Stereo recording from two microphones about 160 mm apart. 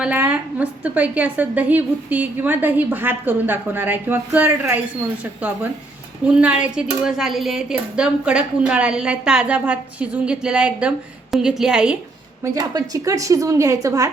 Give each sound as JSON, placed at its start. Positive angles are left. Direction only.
{"t": 0.0, "sound": "a woman's voice", "side_deg": -10}
{"t": 6.2, "sound": "a woman's voice", "side_deg": -10}
{"t": 12.4, "sound": "a woman's voice", "side_deg": -25}